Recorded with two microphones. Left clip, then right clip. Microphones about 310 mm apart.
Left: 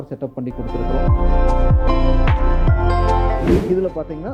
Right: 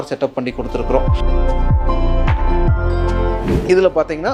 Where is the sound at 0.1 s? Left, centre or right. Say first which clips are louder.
Right 8 dB; centre.